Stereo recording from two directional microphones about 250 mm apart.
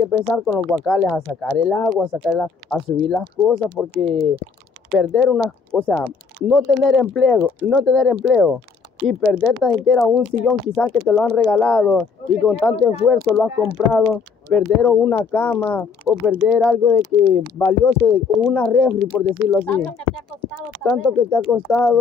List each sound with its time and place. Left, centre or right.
0.1 s speech: centre
17.1 s speech: centre
17.6 s speech: centre